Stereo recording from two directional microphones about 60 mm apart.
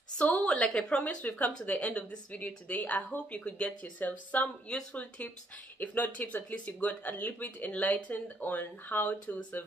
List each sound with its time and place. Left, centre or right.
0.2 s a woman's voice: centre
4.7 s a woman's voice: centre